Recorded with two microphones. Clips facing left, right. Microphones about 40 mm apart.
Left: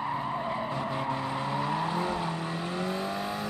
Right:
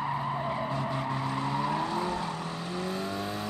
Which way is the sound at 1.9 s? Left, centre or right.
Centre.